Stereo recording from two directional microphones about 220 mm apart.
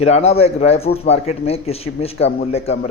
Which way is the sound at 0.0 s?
30° left (ahead or behind).